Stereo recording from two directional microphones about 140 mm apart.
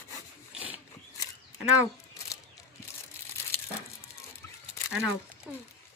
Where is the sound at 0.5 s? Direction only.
10° right (ahead or behind).